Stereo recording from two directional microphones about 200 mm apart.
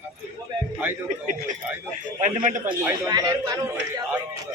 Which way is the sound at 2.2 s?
40° right (ahead or behind).